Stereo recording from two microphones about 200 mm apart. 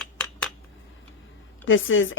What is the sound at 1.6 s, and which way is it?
Speech, 75° left (ahead or behind).